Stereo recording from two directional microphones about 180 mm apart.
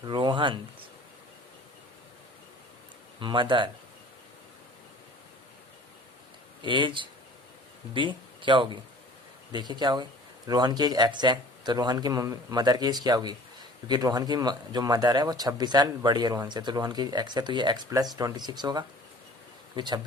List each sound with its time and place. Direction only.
0.1 s speech: 25° right (ahead or behind)
3.2 s speech: 25° right (ahead or behind)
6.6 s speech: 25° right (ahead or behind)